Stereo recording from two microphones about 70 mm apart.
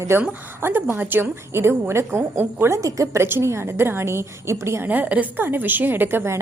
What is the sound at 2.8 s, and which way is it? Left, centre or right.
Speech, right.